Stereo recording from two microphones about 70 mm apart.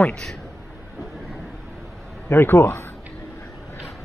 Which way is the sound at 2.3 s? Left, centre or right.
Left.